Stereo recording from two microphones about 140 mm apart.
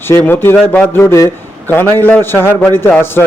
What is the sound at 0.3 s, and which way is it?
A man's voice, 15° left (ahead or behind).